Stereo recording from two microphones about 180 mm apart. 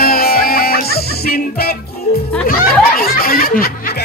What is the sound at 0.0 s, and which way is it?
Music, 55° left (ahead or behind).